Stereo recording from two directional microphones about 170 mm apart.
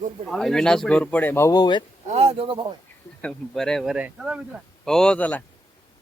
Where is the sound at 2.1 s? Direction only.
35° right (ahead or behind).